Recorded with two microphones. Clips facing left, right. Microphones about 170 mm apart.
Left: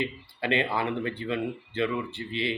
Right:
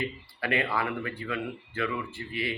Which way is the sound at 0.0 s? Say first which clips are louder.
Left 2 dB; 25° left (ahead or behind).